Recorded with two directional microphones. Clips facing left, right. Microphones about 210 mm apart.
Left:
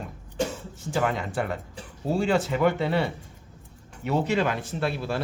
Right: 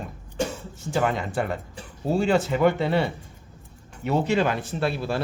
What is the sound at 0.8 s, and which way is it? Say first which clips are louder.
Speech: right 2 dB; 25° right (ahead or behind).